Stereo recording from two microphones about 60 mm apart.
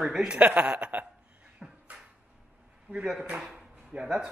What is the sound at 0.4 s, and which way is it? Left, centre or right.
Speech, right.